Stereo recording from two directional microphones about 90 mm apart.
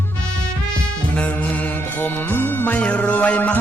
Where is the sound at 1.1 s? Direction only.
15° left (ahead or behind).